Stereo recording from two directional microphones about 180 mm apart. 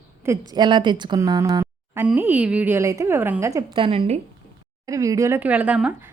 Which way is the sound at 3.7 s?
30° right (ahead or behind).